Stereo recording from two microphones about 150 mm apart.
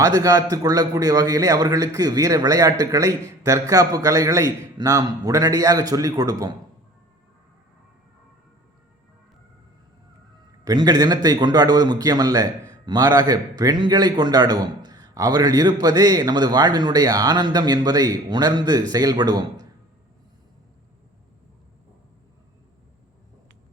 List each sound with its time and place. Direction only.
0.0 s a man's voice: 25° right (ahead or behind)
10.6 s a man's voice: 25° right (ahead or behind)